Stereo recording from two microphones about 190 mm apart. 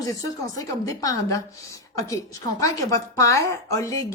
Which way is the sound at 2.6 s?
15° left (ahead or behind).